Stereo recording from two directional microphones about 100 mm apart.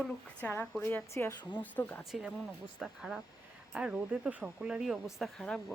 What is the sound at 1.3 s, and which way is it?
Speech, 50° left (ahead or behind).